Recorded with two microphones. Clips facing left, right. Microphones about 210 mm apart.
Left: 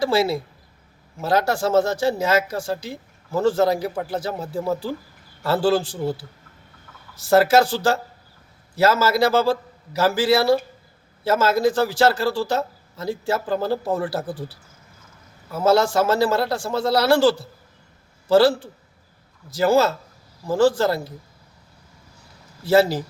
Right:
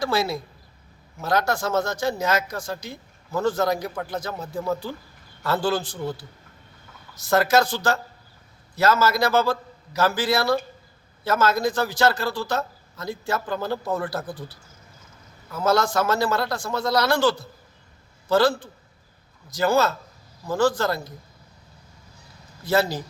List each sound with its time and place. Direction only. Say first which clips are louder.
0.0 s speech: left 4 dB; 30° left (ahead or behind)
15.5 s speech: left 4 dB; 30° left (ahead or behind)
22.6 s speech: left 5 dB; 30° left (ahead or behind)